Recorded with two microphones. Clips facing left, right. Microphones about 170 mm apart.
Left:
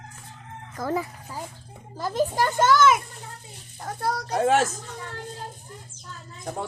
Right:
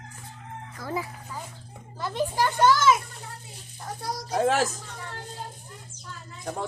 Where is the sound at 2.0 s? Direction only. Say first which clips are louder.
Left 2 dB; 40° left (ahead or behind).